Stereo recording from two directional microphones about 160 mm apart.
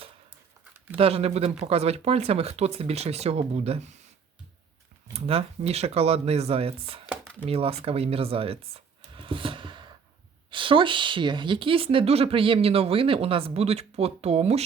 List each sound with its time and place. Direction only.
0.9 s speech: 40° right (ahead or behind)
5.1 s speech: 35° right (ahead or behind)